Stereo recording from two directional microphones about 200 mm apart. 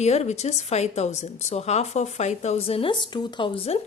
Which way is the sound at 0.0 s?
35° left (ahead or behind).